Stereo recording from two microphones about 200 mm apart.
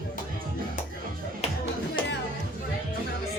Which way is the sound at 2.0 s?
25° left (ahead or behind).